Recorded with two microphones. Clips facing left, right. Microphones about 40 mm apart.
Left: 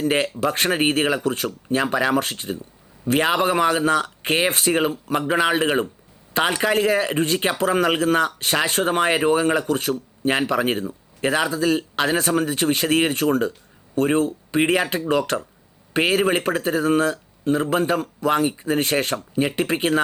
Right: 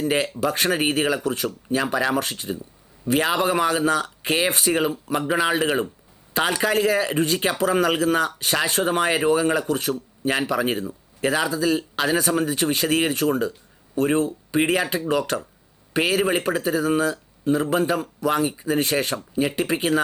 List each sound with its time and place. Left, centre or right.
0.0 s speech: left
1.8 s speech: centre
2.1 s speech: left
4.9 s speech: centre
5.3 s speech: left
17.5 s speech: left